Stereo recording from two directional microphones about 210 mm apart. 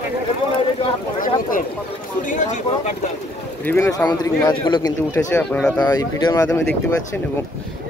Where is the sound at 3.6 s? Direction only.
10° left (ahead or behind).